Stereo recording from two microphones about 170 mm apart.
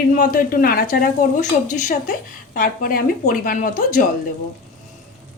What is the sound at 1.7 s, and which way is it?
Speech, 45° left (ahead or behind).